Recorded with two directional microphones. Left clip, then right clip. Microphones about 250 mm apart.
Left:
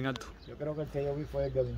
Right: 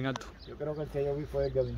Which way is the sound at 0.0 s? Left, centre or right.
Centre.